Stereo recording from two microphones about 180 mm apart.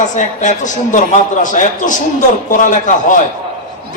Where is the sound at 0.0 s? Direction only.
45° left (ahead or behind).